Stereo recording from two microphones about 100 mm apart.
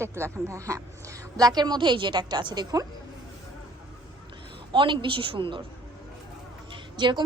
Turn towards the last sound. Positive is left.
turn(degrees=-50)  # may be behind; listen again after turning